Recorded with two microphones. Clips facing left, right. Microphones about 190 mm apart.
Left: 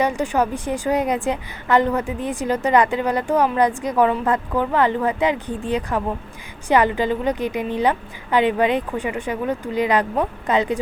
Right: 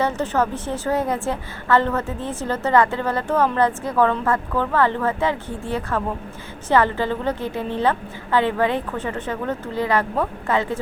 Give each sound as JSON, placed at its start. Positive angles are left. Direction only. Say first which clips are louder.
{"t": 0.0, "sound": "a woman's voice", "louder": "left 1 dB", "side_deg": 15}